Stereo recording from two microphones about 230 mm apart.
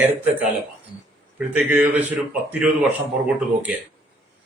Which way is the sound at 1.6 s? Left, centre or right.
Centre.